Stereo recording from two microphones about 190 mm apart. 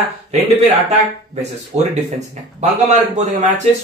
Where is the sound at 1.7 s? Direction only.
35° right (ahead or behind).